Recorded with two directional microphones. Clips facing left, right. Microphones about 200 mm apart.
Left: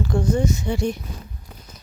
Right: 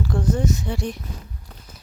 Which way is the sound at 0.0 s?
Centre (ahead or behind).